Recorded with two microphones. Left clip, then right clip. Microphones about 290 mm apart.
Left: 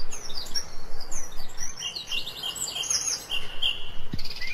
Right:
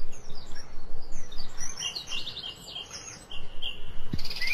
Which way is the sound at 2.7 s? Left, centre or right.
Left.